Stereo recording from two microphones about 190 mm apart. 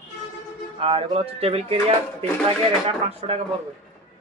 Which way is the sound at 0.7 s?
30° right (ahead or behind).